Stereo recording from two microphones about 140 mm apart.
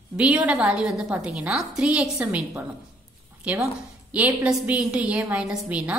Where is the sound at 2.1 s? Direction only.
20° right (ahead or behind).